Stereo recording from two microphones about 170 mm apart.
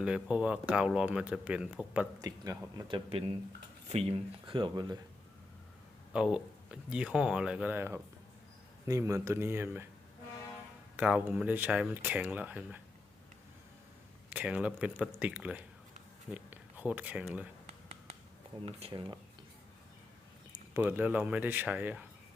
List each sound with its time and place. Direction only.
0.0 s speech: 5° right (ahead or behind)
2.2 s speech: 20° right (ahead or behind)
6.1 s speech: 5° right (ahead or behind)
10.9 s speech: 10° right (ahead or behind)
14.3 s speech: 10° right (ahead or behind)
18.6 s speech: 30° right (ahead or behind)
20.7 s speech: 10° right (ahead or behind)